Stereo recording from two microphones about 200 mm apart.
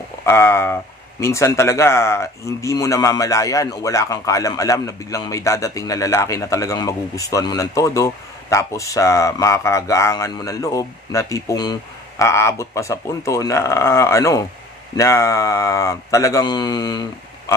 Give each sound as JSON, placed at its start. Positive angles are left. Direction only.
{"t": 0.2, "sound": "speech", "side_deg": 10}